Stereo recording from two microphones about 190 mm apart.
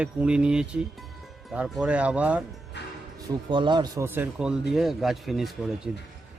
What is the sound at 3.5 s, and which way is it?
Speech, 25° right (ahead or behind).